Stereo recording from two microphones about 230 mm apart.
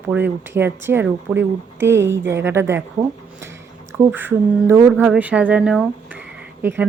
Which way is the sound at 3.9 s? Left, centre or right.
Centre.